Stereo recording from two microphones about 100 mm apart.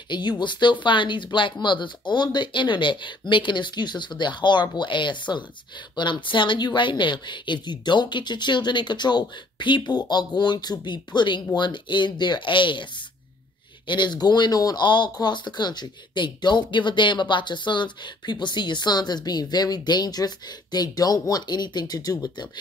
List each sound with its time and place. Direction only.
0.1 s speech: 50° left (ahead or behind)
13.8 s speech: 50° left (ahead or behind)